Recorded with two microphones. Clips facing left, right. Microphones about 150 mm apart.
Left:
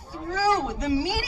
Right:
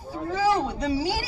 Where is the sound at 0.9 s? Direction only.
35° right (ahead or behind).